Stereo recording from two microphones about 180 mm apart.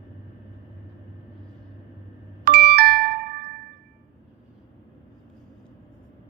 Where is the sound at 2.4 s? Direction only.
60° right (ahead or behind).